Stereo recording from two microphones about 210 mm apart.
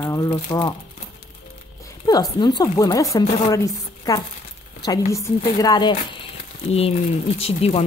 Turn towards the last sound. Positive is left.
turn(degrees=30)  # may be behind; listen again after turning